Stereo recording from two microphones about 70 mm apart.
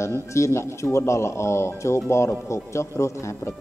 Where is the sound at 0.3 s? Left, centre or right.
Left.